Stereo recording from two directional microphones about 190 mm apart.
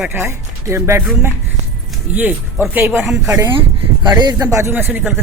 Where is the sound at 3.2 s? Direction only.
15° right (ahead or behind).